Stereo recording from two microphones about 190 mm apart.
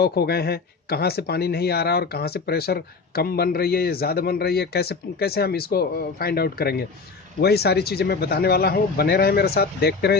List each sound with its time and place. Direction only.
0.0 s speech: 55° left (ahead or behind)